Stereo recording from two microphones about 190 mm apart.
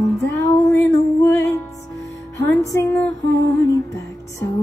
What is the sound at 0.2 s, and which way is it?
Music, 15° left (ahead or behind).